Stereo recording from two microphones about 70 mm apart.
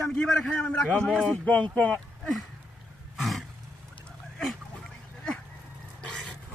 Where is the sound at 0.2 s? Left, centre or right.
Centre.